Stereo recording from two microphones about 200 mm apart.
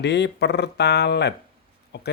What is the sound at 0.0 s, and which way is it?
Speech, 60° left (ahead or behind).